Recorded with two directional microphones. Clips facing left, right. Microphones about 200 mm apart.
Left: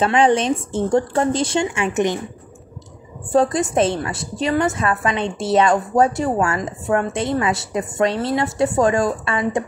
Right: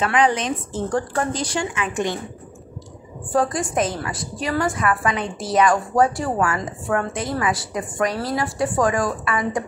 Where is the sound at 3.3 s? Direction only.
25° left (ahead or behind).